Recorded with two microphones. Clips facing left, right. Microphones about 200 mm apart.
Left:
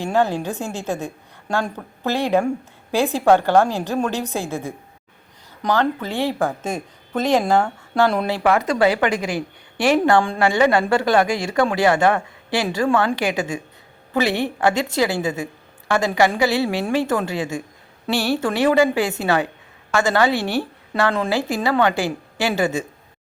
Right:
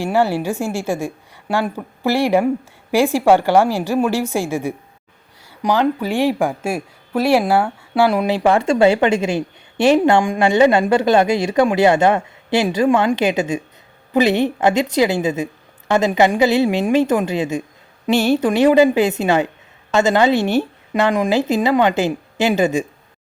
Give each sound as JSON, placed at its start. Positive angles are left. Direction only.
{"t": 0.0, "sound": "speech", "side_deg": -10}
{"t": 8.4, "sound": "a woman's voice", "side_deg": -25}